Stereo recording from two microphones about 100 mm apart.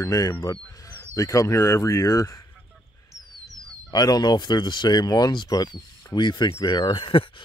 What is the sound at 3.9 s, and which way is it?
Speech, 40° left (ahead or behind).